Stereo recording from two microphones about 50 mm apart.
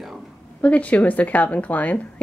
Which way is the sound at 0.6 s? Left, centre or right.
Left.